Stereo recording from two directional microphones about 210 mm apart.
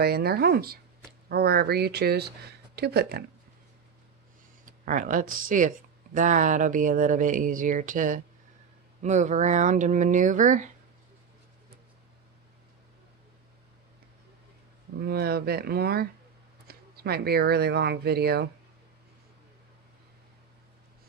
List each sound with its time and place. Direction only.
0.0 s speech: 50° right (ahead or behind)
4.6 s speech: 40° right (ahead or behind)
15.0 s speech: 50° right (ahead or behind)